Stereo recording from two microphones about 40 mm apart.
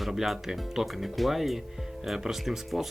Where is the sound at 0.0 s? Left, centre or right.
Centre.